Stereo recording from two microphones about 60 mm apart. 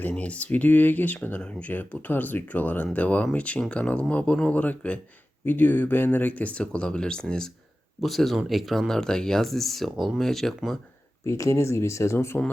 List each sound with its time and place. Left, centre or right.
0.1 s speech: left
1.4 s speech: centre
1.9 s speech: left; by 7.4 s centre
8.0 s speech: centre
11.3 s speech: left